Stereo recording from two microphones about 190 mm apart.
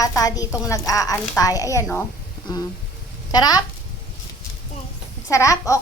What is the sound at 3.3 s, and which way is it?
Speech, 20° left (ahead or behind).